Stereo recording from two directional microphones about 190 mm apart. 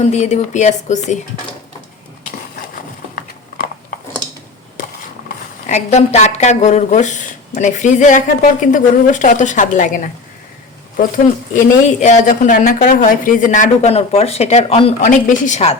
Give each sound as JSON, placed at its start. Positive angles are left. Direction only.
{"t": 0.0, "sound": "speech", "side_deg": 35}
{"t": 5.6, "sound": "speech", "side_deg": 40}
{"t": 11.9, "sound": "speech", "side_deg": 40}